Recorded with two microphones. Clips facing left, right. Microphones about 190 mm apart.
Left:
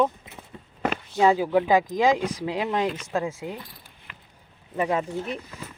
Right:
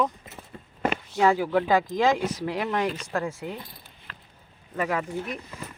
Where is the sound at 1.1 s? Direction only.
20° left (ahead or behind).